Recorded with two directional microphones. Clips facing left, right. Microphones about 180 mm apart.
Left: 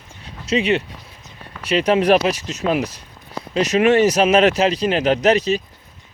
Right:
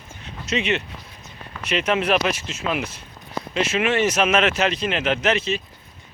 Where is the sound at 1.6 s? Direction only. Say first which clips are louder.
Left 6 dB; 35° left (ahead or behind).